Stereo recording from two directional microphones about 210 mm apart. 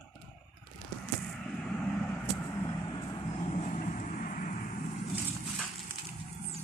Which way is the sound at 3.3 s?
30° left (ahead or behind).